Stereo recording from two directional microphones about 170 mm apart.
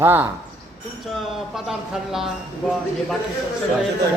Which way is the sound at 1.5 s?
Centre (ahead or behind).